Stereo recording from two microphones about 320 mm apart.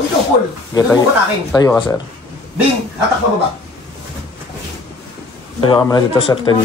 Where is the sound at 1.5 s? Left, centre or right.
Centre.